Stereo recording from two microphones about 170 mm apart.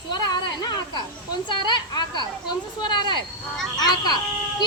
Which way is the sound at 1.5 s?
25° left (ahead or behind).